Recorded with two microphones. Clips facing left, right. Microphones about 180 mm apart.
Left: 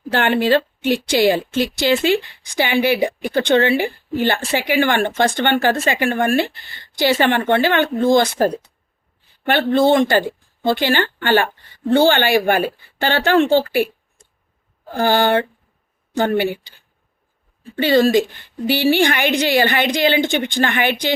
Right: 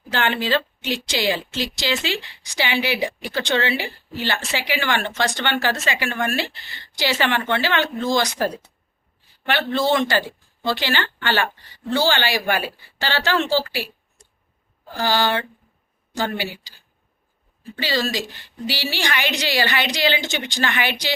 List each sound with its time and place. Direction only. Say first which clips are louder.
0.1 s a woman's voice: left 6 dB; 55° left (ahead or behind)
17.7 s a woman's voice: left 10 dB; 55° left (ahead or behind)